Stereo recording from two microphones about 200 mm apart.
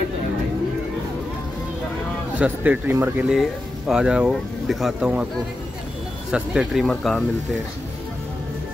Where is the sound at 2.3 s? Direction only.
5° right (ahead or behind).